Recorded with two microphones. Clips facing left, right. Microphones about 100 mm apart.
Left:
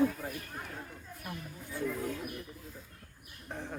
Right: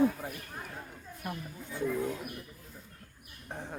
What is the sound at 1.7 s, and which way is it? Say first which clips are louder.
Roaring cats: right 3 dB; 20° right (ahead or behind).